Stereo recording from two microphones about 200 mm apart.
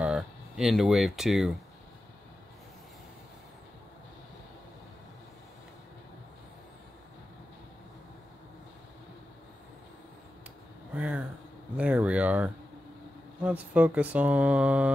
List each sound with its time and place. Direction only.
0.0 s speech: 5° right (ahead or behind)
11.0 s speech: 5° right (ahead or behind)